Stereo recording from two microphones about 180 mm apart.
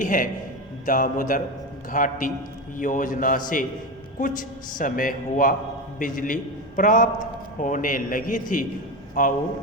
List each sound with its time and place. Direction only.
0.0 s a man's voice: 45° left (ahead or behind)